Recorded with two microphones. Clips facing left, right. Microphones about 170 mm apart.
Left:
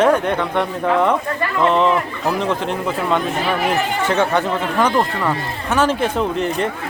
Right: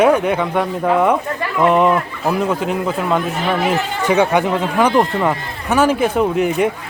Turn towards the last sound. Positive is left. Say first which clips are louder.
# right 4 dB
turn(degrees=-10)  # may be behind; listen again after turning